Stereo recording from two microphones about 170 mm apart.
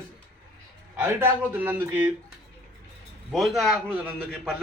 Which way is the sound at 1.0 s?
10° right (ahead or behind).